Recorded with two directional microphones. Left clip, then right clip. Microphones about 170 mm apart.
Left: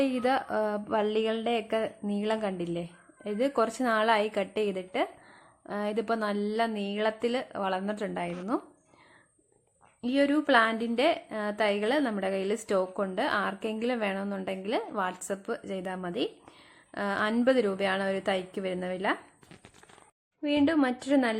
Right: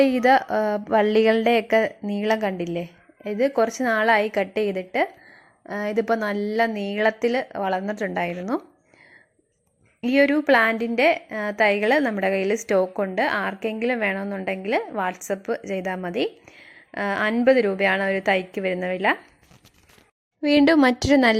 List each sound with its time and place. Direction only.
0.0 s a woman's voice: 20° right (ahead or behind)
10.0 s a woman's voice: 25° right (ahead or behind)
20.4 s a woman's voice: 40° right (ahead or behind)